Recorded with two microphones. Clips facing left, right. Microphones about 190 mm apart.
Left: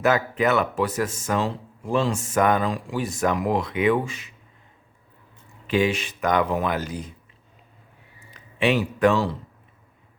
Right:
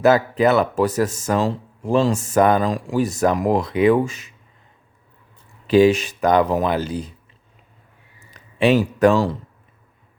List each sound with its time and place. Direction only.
0.0 s speech: 35° right (ahead or behind)
5.6 s speech: 35° right (ahead or behind)
8.3 s a man's voice: 35° right (ahead or behind)